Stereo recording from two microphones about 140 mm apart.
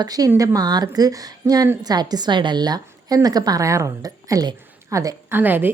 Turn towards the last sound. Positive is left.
turn(degrees=-15)  # may be behind; listen again after turning